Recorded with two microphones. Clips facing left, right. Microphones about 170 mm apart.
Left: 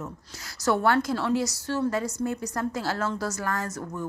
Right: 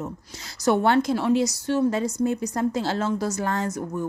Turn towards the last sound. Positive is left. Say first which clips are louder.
# right 4 dB
turn(degrees=-20)  # may be behind; listen again after turning